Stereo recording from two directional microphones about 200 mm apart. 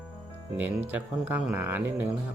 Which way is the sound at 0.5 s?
10° right (ahead or behind).